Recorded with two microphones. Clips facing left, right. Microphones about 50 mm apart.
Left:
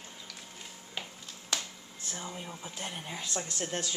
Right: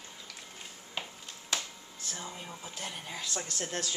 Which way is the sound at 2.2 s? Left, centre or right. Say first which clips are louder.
Left 2 dB; centre.